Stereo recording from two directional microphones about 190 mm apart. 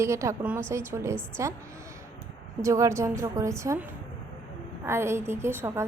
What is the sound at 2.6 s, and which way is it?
A woman's voice, 15° right (ahead or behind).